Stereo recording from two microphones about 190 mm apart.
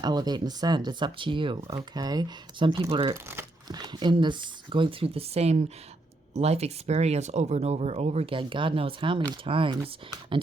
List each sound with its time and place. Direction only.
0.0 s speech: 20° right (ahead or behind)